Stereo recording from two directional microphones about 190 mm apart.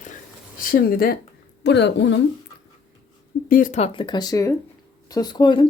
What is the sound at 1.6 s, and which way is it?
Speech, 65° left (ahead or behind).